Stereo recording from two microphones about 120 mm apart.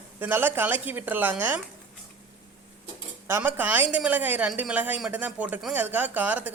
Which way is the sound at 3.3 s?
20° right (ahead or behind).